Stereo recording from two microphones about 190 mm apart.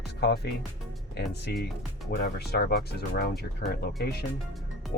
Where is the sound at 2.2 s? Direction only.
55° left (ahead or behind).